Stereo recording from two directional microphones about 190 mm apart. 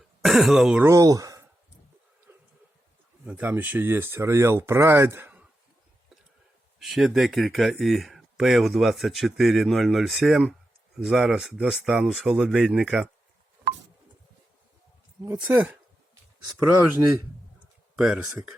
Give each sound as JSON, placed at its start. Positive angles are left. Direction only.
{"t": 0.2, "sound": "speech", "side_deg": 0}
{"t": 0.9, "sound": "speech", "side_deg": -20}
{"t": 2.3, "sound": "bee", "side_deg": -10}
{"t": 3.2, "sound": "speech", "side_deg": -10}
{"t": 6.7, "sound": "speech", "side_deg": 0}
{"t": 15.2, "sound": "speech", "side_deg": -15}
{"t": 17.9, "sound": "speech", "side_deg": -5}